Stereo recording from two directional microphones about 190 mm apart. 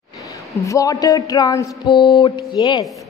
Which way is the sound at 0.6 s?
20° left (ahead or behind).